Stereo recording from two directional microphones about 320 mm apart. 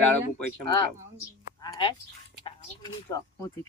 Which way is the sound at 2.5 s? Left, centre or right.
Centre.